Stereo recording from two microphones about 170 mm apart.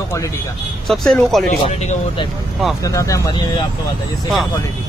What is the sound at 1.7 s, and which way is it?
Speech, 40° left (ahead or behind).